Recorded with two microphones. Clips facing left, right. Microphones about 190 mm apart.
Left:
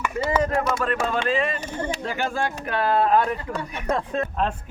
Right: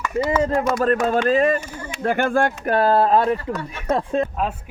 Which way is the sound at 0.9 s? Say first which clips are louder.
Right 6 dB; 40° right (ahead or behind).